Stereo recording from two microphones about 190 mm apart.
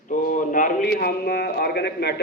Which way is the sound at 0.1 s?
45° left (ahead or behind).